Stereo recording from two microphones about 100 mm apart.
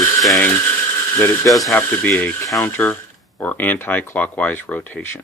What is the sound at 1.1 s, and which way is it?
Speech, 25° left (ahead or behind).